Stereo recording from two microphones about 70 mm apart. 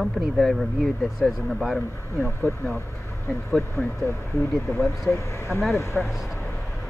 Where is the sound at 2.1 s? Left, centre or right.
Left.